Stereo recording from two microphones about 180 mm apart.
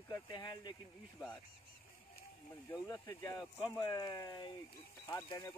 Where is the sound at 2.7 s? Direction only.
15° left (ahead or behind).